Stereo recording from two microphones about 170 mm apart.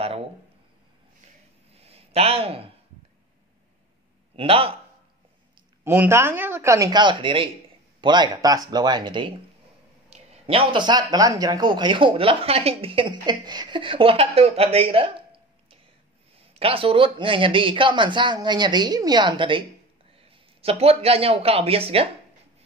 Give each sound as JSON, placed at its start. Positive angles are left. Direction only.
{"t": 1.8, "sound": "a sound", "side_deg": -35}
{"t": 4.4, "sound": "a man's voice", "side_deg": -35}
{"t": 5.9, "sound": "speech", "side_deg": -15}
{"t": 10.0, "sound": "a man's voice", "side_deg": -40}
{"t": 16.3, "sound": "speech", "side_deg": -35}